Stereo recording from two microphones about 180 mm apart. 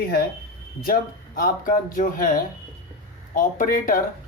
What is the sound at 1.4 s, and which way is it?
Speech, 50° left (ahead or behind).